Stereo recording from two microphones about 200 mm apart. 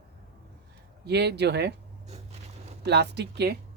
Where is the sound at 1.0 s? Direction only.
55° right (ahead or behind).